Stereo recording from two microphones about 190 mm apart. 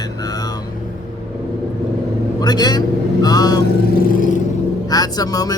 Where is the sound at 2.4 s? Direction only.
20° left (ahead or behind).